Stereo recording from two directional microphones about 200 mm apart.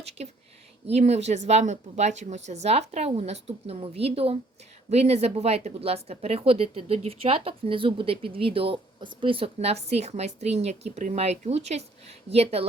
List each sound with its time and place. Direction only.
0.9 s speech: 30° right (ahead or behind)